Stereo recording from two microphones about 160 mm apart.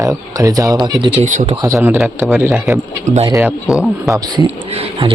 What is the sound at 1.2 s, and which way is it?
Speech, 50° right (ahead or behind).